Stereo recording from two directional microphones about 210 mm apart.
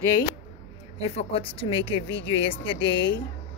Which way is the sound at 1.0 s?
30° left (ahead or behind).